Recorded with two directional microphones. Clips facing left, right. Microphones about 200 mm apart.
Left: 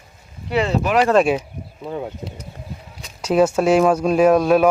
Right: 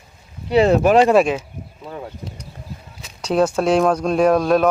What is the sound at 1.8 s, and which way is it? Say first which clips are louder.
Speech: left 5 dB; 15° left (ahead or behind).